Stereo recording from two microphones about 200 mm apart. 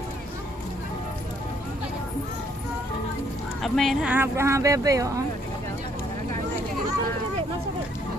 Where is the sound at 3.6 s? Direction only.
Centre (ahead or behind); by 5.2 s 15° right (ahead or behind).